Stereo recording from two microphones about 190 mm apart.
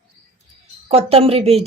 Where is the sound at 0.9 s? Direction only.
30° right (ahead or behind).